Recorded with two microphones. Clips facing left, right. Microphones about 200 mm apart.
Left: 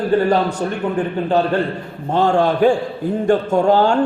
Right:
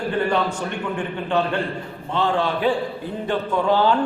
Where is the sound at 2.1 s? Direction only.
45° left (ahead or behind).